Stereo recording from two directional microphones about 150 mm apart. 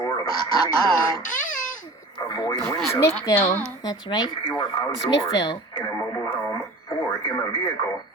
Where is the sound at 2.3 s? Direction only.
30° left (ahead or behind).